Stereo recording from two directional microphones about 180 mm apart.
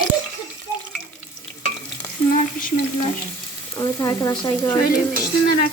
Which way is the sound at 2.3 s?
50° left (ahead or behind).